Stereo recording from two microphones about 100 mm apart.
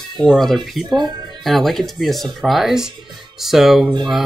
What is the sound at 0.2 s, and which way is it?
Speech, 5° left (ahead or behind).